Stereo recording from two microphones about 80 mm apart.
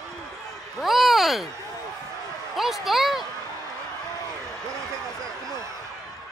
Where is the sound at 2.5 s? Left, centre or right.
Centre.